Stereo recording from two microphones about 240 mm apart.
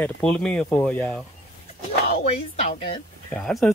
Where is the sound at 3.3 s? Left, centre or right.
Centre.